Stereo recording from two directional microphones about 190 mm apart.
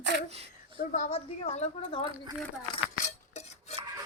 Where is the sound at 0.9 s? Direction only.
35° left (ahead or behind).